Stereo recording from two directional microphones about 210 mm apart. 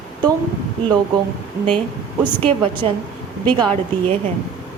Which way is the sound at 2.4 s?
25° right (ahead or behind).